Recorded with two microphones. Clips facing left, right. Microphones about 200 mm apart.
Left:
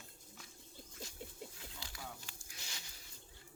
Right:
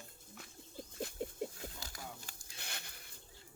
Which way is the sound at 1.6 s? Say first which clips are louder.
Right 3 dB; 45° right (ahead or behind).